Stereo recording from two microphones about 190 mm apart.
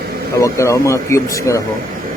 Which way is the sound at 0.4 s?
15° left (ahead or behind).